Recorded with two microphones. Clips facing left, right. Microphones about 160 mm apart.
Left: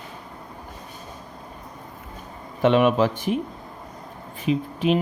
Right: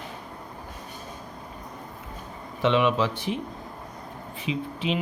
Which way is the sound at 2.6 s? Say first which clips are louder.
Left 4 dB; 50° left (ahead or behind).